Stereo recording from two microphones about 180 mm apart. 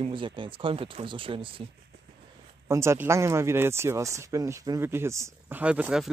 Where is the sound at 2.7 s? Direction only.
15° right (ahead or behind).